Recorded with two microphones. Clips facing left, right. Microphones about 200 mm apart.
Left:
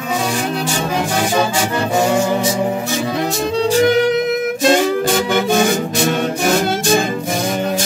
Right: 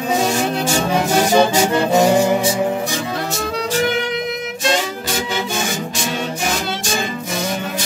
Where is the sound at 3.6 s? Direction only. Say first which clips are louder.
Left 7 dB; 35° left (ahead or behind).